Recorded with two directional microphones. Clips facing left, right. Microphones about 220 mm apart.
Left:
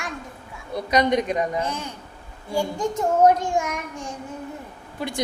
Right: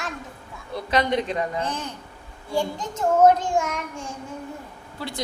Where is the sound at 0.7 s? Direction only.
15° left (ahead or behind).